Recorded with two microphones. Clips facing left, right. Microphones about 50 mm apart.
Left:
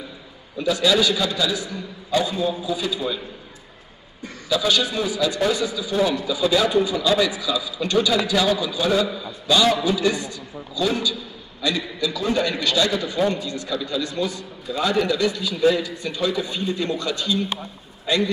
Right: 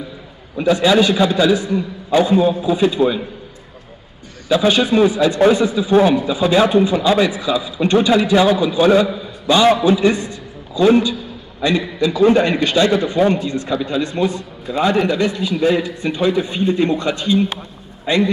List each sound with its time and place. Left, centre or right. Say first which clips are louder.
0.6 s a man's voice: right 6 dB; right
4.5 s a man's voice: right 7 dB; right